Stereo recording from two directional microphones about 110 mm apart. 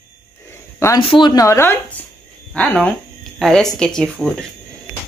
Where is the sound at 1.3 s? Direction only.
30° left (ahead or behind).